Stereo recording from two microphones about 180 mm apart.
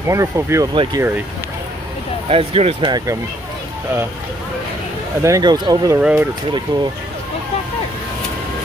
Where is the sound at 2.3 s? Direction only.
35° right (ahead or behind).